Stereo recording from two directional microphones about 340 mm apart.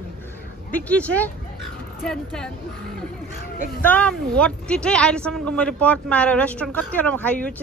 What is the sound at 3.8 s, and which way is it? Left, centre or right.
Speech, centre.